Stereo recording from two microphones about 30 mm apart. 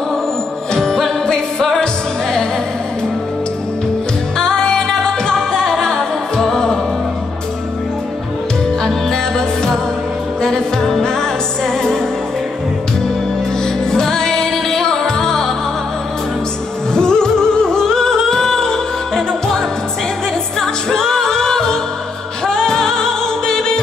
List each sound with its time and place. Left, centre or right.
0.7 s music: centre
4.7 s music: centre
10.4 s music: centre
13.8 s music: left
16.9 s music: left
20.6 s music: centre